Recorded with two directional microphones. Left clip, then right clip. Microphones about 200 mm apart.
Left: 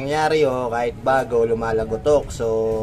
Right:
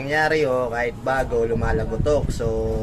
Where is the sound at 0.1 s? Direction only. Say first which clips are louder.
Left 1 dB; 15° left (ahead or behind).